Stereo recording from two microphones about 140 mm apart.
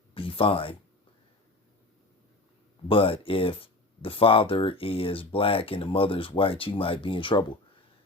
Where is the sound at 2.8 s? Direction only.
40° left (ahead or behind).